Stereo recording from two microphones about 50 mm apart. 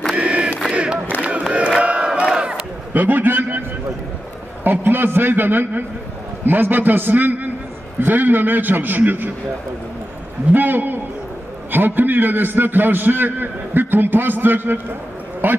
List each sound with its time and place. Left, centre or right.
0.1 s battle cry: right
1.2 s crowd: right
1.8 s battle cry: right
2.9 s a sound: right
4.6 s a man's voice: right
10.5 s a man's voice: right